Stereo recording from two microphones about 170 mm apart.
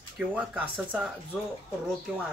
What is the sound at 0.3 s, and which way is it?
Speech, 10° right (ahead or behind).